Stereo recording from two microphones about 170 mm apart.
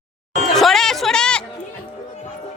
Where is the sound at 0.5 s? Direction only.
Centre (ahead or behind).